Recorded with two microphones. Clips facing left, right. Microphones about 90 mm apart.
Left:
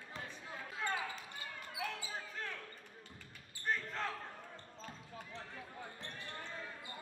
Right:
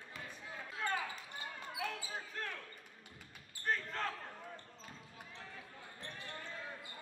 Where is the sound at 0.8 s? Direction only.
5° left (ahead or behind).